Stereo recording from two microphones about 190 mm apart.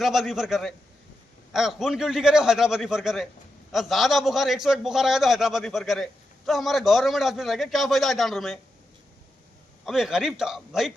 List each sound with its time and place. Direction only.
0.0 s a man's voice: centre (ahead or behind)
9.8 s a man's voice: centre (ahead or behind)